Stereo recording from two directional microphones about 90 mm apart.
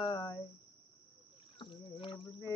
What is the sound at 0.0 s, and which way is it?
Cricket, 45° left (ahead or behind).